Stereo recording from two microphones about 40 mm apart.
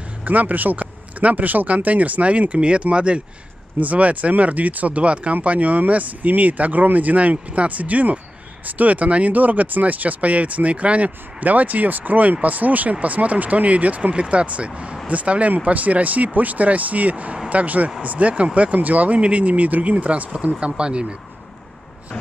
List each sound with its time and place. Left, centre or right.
0.2 s speech: right
3.8 s speech: right
20.6 s speech: right